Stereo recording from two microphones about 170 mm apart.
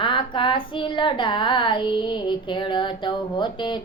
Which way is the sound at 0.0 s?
30° left (ahead or behind).